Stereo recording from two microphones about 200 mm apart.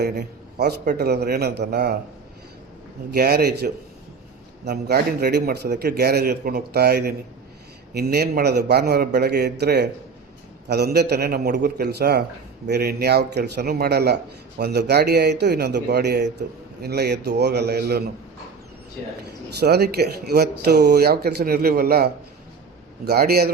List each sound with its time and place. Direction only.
0.0 s speech: 55° right (ahead or behind)
3.1 s a man's voice: 50° right (ahead or behind)
19.5 s speech: 55° right (ahead or behind)